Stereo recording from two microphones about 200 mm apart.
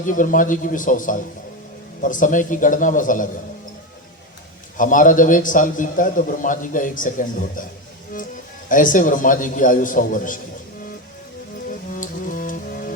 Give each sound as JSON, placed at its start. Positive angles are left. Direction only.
{"t": 0.0, "sound": "a man's voice", "side_deg": 40}
{"t": 4.8, "sound": "a man's voice", "side_deg": 40}
{"t": 8.7, "sound": "a man's voice", "side_deg": 40}
{"t": 11.7, "sound": "music", "side_deg": 40}